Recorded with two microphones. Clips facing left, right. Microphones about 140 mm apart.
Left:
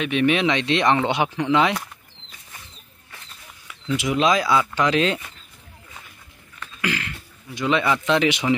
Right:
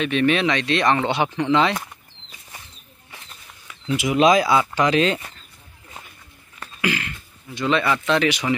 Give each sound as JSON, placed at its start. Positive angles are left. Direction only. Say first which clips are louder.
{"t": 0.0, "sound": "speech", "louder": "even", "side_deg": 10}
{"t": 3.6, "sound": "speech", "louder": "right 1 dB", "side_deg": -5}
{"t": 6.8, "sound": "throat clearing", "louder": "right 2 dB", "side_deg": -5}
{"t": 7.5, "sound": "speech", "louder": "even", "side_deg": 10}